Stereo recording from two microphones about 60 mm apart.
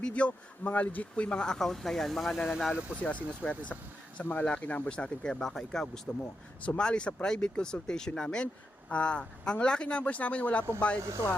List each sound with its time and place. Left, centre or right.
0.0 s speech: left; by 2.7 s centre
3.0 s speech: left